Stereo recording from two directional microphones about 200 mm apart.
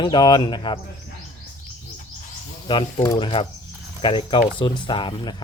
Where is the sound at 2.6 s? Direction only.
20° left (ahead or behind).